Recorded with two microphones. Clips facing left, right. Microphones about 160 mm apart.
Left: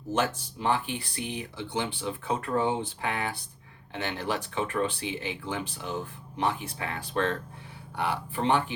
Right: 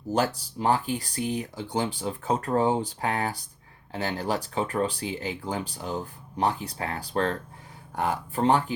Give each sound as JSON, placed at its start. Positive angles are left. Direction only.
{"t": 0.1, "sound": "speech", "side_deg": -35}